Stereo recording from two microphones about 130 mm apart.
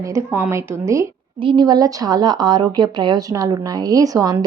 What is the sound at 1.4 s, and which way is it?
Speech, 35° right (ahead or behind).